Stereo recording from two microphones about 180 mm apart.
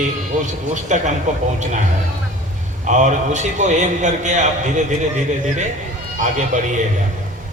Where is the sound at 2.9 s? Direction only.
40° right (ahead or behind).